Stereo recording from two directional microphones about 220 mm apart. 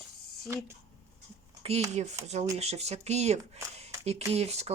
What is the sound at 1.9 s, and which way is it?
Speech, 30° right (ahead or behind).